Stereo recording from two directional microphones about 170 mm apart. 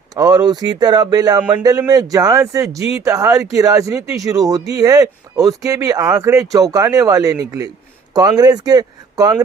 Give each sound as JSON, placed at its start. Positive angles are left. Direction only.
{"t": 0.2, "sound": "speech", "side_deg": -20}
{"t": 1.4, "sound": "speech", "side_deg": -10}
{"t": 1.6, "sound": "speech", "side_deg": -20}